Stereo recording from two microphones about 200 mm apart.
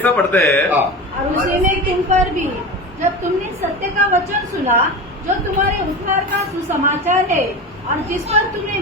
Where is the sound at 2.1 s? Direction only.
35° right (ahead or behind).